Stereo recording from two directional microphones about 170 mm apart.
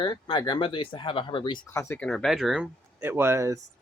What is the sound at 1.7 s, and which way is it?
Speech, 15° left (ahead or behind).